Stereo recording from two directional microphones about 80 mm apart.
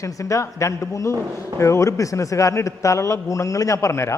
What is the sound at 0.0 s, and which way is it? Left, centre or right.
A man's voice, left.